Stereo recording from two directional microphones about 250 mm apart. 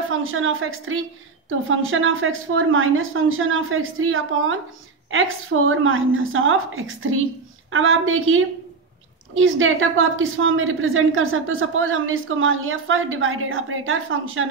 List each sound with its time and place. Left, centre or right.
0.1 s a woman's voice: right